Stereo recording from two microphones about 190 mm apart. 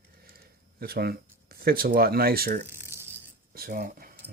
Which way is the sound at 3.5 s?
50° right (ahead or behind).